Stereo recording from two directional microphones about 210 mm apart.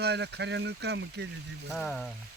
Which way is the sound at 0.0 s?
55° right (ahead or behind).